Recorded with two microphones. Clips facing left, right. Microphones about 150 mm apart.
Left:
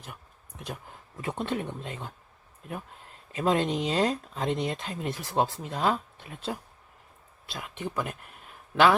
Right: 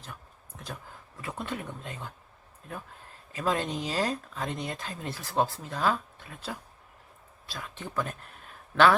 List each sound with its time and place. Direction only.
0.6 s speech: 25° left (ahead or behind)
3.3 s a man's voice: 25° left (ahead or behind)